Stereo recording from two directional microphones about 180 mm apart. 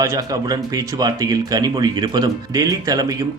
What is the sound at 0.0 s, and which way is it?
Speech, 20° right (ahead or behind).